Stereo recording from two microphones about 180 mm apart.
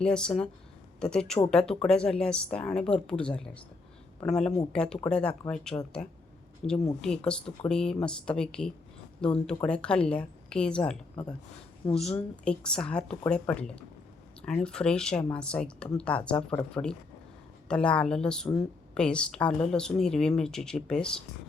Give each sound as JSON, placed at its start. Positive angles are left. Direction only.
{"t": 0.0, "sound": "a woman's voice", "side_deg": 5}
{"t": 6.6, "sound": "a woman's voice", "side_deg": 35}
{"t": 7.0, "sound": "speech", "side_deg": 5}
{"t": 11.9, "sound": "a woman's voice", "side_deg": 35}
{"t": 12.1, "sound": "speech", "side_deg": 5}